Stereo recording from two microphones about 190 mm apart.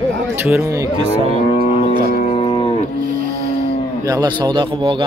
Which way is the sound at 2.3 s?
30° left (ahead or behind).